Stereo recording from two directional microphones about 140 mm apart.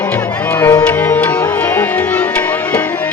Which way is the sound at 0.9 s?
10° left (ahead or behind).